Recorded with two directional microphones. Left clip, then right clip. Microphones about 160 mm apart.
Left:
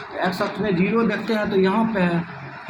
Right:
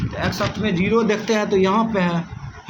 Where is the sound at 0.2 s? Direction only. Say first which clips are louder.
Even; 65° right (ahead or behind).